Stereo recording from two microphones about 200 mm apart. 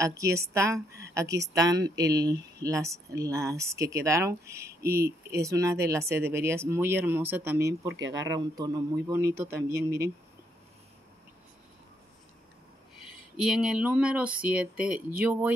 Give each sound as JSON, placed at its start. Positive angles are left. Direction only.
{"t": 0.0, "sound": "speech", "side_deg": -15}
{"t": 13.4, "sound": "speech", "side_deg": -5}